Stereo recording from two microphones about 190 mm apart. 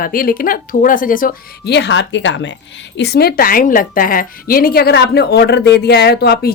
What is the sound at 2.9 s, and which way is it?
A woman's voice, 60° left (ahead or behind).